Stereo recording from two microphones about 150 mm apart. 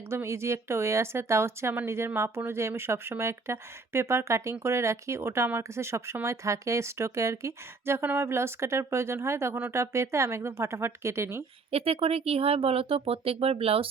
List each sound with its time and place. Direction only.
0.1 s speech: 15° right (ahead or behind)
11.7 s speech: 40° right (ahead or behind)